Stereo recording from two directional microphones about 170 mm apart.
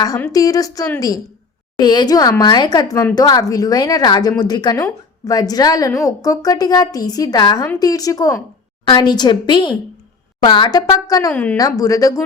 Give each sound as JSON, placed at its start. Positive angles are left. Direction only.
{"t": 0.2, "sound": "speech", "side_deg": 20}